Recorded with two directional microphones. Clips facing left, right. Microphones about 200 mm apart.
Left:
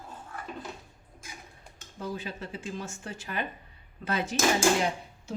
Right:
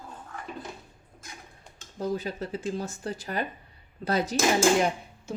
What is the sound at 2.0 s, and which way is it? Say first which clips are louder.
Speech: right 6 dB; 40° right (ahead or behind).